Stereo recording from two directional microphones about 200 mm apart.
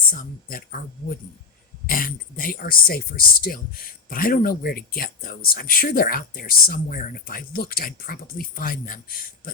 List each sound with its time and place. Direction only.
0.1 s speech: 45° left (ahead or behind)